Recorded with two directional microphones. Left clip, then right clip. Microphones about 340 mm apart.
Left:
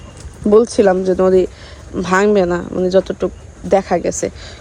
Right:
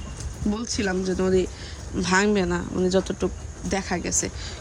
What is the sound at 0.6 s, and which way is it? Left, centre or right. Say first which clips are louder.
A woman's voice: left 14 dB; centre.